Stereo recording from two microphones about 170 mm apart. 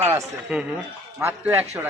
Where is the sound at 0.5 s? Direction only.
5° right (ahead or behind).